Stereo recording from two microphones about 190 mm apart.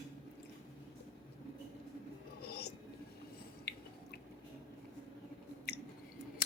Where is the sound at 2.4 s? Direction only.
55° left (ahead or behind).